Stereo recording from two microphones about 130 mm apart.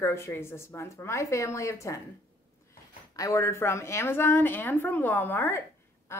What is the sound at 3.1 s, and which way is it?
A woman's voice, 25° left (ahead or behind).